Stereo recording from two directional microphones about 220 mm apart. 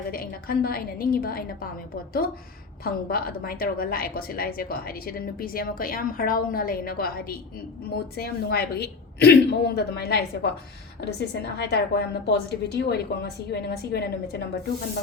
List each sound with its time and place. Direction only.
0.1 s a woman's voice: 40° left (ahead or behind)